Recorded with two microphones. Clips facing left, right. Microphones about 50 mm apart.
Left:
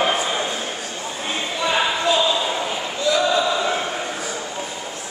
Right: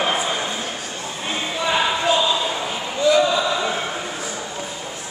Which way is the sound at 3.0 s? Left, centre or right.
Centre.